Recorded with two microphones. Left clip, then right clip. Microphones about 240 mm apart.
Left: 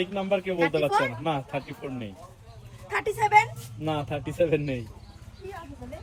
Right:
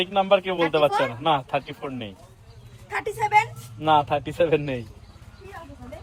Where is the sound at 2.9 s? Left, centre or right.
Centre.